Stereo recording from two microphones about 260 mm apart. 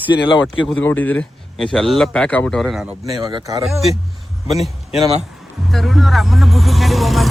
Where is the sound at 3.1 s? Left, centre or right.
Centre.